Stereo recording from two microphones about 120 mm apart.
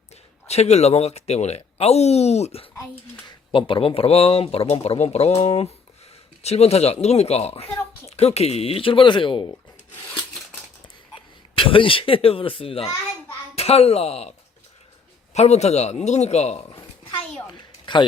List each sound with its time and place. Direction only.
0.4 s speech: 65° left (ahead or behind)
3.2 s speech: 45° left (ahead or behind)
10.8 s a sound: 45° left (ahead or behind)
13.6 s a man's voice: 60° left (ahead or behind)